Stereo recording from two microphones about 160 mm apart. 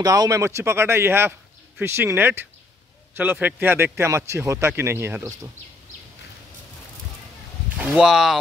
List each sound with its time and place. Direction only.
0.0 s speech: 20° right (ahead or behind)
7.7 s speech: 10° right (ahead or behind)